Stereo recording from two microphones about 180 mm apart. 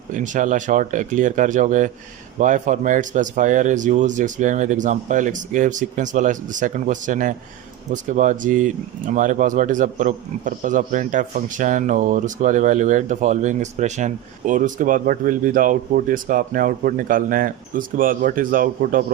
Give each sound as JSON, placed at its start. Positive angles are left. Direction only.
{"t": 0.1, "sound": "speech", "side_deg": -45}